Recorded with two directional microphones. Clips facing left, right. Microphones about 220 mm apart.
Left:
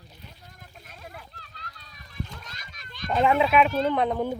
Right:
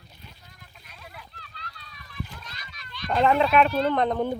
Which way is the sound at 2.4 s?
45° left (ahead or behind).